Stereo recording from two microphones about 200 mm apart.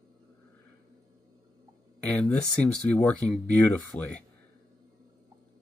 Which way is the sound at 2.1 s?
5° left (ahead or behind).